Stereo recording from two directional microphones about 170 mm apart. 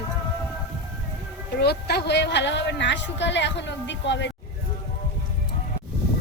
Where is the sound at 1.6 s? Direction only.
70° left (ahead or behind); by 4.3 s 90° left.